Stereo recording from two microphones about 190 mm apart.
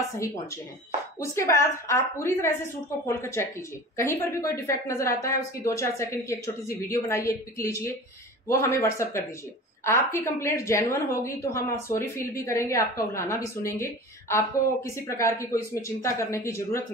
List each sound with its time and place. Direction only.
1.2 s a woman's voice: 15° left (ahead or behind)